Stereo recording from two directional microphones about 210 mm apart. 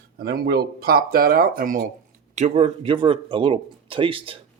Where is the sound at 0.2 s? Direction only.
45° right (ahead or behind).